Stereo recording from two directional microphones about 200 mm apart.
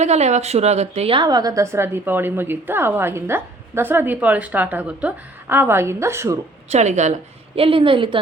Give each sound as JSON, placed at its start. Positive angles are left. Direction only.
{"t": 0.0, "sound": "a woman's voice", "side_deg": -35}
{"t": 6.7, "sound": "a woman's voice", "side_deg": -35}